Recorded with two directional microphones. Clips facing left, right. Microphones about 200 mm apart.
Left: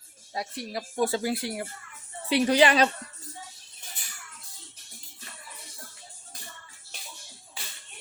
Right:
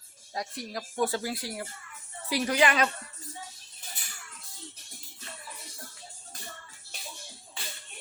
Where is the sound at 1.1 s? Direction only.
20° left (ahead or behind).